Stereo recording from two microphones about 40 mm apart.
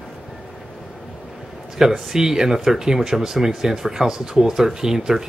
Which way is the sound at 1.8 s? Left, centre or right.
Centre.